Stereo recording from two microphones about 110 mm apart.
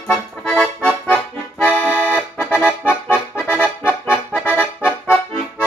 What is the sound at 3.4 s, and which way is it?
Accordion, 10° right (ahead or behind).